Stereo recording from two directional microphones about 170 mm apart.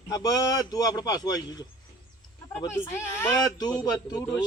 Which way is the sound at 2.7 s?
15° left (ahead or behind).